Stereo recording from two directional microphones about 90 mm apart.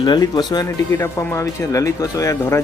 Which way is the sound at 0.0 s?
55° left (ahead or behind).